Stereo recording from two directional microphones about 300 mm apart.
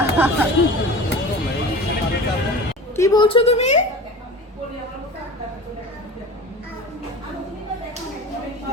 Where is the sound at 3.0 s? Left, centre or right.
Centre.